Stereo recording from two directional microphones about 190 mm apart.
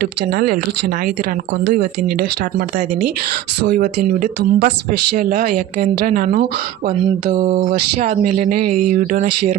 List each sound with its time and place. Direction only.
0.0 s speech: 55° right (ahead or behind)
5.1 s speech: 45° right (ahead or behind)
7.3 s a sound: 30° right (ahead or behind)
7.6 s speech: 40° right (ahead or behind)